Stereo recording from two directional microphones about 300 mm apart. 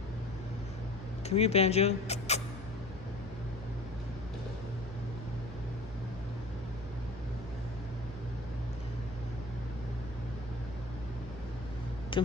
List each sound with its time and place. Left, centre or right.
1.2 s speech: left